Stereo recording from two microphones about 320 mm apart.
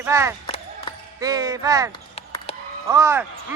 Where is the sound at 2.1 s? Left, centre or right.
Centre.